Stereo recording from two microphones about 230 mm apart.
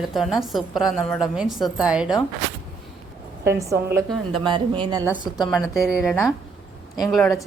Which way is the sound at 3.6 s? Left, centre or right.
Centre.